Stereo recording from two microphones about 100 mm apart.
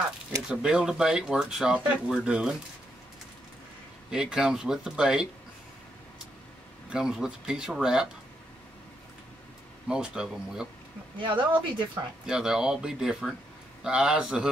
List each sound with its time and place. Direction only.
0.5 s speech: 5° right (ahead or behind)
4.1 s speech: 5° right (ahead or behind)
6.9 s speech: 5° right (ahead or behind)
9.8 s speech: 10° right (ahead or behind)
11.1 s speech: 55° right (ahead or behind)
12.3 s speech: 5° right (ahead or behind)